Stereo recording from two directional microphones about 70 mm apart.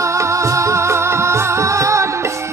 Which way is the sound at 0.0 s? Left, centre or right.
Right.